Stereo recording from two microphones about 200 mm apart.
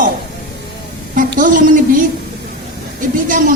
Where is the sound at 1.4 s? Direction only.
40° right (ahead or behind).